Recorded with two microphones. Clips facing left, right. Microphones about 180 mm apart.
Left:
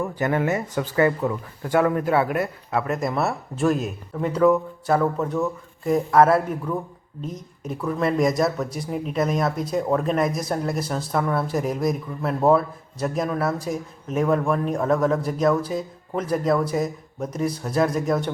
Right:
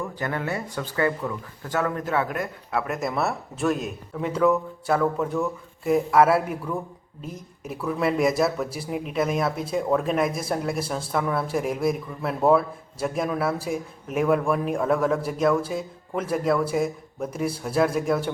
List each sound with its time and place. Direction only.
0.2 s a man's voice: 15° left (ahead or behind)
1.7 s a man's voice: 10° left (ahead or behind); by 6.6 s 5° right (ahead or behind)
7.6 s speech: 5° right (ahead or behind)